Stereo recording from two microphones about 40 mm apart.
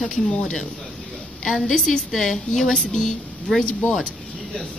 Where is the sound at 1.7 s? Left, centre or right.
Centre.